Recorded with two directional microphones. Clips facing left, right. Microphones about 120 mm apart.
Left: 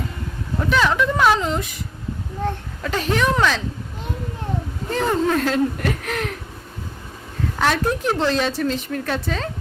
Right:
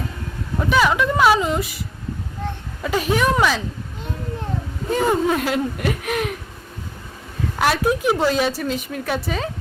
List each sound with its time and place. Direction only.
0.6 s a woman's voice: 5° right (ahead or behind)
2.8 s a woman's voice: 10° right (ahead or behind)
4.9 s a woman's voice: 10° right (ahead or behind)
7.6 s a woman's voice: 10° right (ahead or behind)